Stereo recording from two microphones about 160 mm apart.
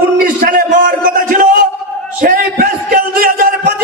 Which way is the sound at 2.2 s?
65° right (ahead or behind).